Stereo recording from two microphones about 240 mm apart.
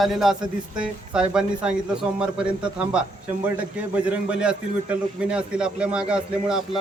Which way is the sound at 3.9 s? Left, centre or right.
Centre.